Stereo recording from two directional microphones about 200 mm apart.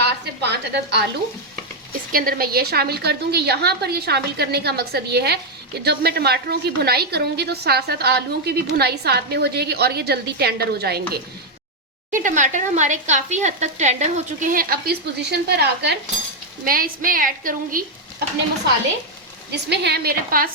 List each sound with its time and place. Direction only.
0.0 s a sound: 55° right (ahead or behind)
1.9 s a woman's voice: 45° right (ahead or behind)
12.1 s speech: 40° right (ahead or behind); by 16.0 s 55° right (ahead or behind)
16.6 s a woman's voice: 45° right (ahead or behind)
19.5 s a woman's voice: 55° right (ahead or behind)